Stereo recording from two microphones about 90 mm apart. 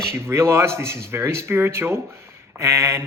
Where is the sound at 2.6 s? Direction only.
30° right (ahead or behind).